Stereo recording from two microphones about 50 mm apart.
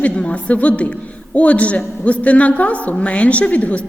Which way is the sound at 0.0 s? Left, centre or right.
Left.